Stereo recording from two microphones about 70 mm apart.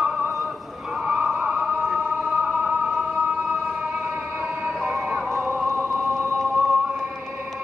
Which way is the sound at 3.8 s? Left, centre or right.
Right.